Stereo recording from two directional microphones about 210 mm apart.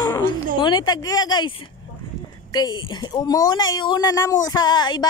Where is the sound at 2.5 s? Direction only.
20° left (ahead or behind).